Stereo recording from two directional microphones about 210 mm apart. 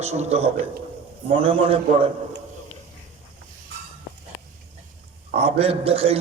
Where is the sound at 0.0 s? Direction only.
30° right (ahead or behind).